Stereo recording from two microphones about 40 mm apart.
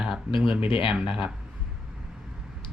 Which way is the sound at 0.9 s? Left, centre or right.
Right.